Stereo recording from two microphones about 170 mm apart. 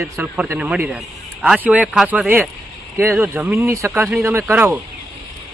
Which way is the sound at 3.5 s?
15° right (ahead or behind).